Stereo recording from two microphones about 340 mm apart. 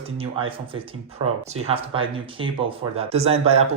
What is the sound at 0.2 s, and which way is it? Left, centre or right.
Speech, centre.